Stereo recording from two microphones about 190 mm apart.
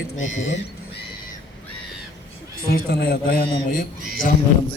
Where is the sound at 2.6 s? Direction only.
55° left (ahead or behind).